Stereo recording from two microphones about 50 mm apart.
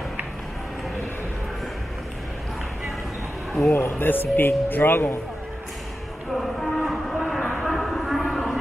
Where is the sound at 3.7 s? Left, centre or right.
Left.